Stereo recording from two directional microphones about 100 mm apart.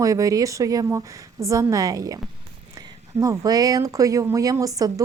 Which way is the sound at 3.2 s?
35° right (ahead or behind).